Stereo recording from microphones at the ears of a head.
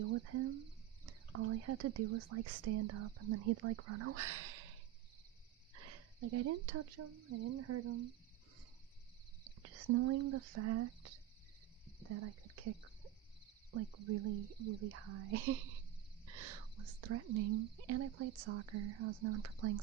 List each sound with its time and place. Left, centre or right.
0.0 s speech: right
9.4 s speech: right
12.0 s a sound: right
13.7 s speech: right